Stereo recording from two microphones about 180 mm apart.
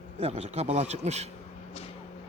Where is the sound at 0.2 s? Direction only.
35° right (ahead or behind).